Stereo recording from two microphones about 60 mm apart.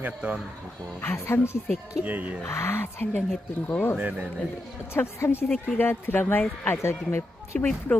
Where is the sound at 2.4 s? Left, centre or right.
Left.